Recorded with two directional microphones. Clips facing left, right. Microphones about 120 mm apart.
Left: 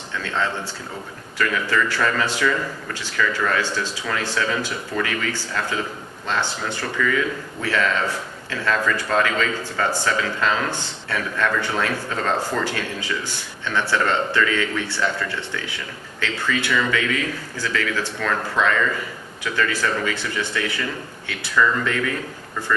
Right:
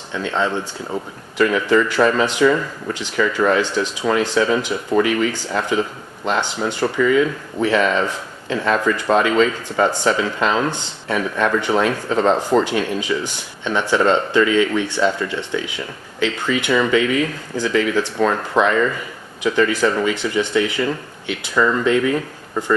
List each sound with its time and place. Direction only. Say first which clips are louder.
0.1 s speech: right 5 dB; 20° right (ahead or behind)